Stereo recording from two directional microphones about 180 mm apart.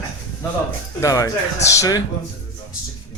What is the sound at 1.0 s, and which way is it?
Speech, 20° left (ahead or behind).